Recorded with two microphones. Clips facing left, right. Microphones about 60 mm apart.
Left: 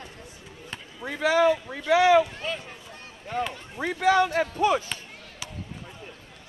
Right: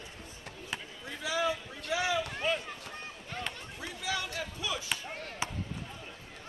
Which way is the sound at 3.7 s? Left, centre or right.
Left.